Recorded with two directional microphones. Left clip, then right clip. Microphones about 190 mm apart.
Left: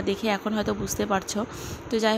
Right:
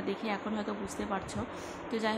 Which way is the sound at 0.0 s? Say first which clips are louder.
Left 9 dB; 35° left (ahead or behind).